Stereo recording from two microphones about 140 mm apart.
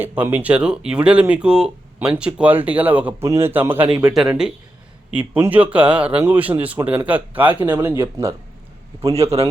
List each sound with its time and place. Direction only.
0.0 s speech: 15° right (ahead or behind)
9.1 s speech: 45° right (ahead or behind)